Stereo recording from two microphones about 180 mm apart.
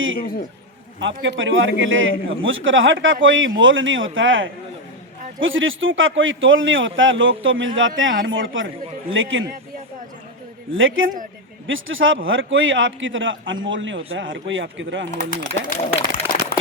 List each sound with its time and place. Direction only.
0.2 s a man's voice: 55° left (ahead or behind)
0.9 s a man's voice: 90° right
10.7 s a man's voice: 90° right
15.1 s speech: 50° left (ahead or behind)